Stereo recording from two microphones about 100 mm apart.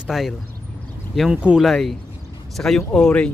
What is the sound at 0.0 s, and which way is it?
Speech, centre (ahead or behind).